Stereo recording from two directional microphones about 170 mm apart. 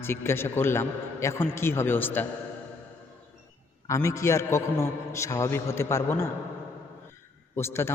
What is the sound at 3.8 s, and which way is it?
A man's voice, 20° left (ahead or behind).